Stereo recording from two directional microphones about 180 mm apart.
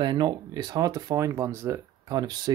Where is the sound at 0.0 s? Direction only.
25° right (ahead or behind).